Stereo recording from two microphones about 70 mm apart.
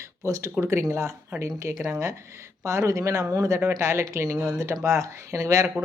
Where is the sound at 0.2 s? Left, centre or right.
Right.